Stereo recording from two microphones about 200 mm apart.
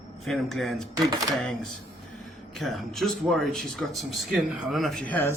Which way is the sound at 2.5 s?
Centre (ahead or behind).